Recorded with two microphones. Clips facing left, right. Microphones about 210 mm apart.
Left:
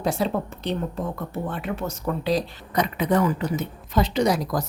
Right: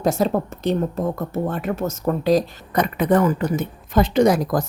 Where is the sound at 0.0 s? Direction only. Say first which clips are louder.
Right 5 dB; 45° right (ahead or behind).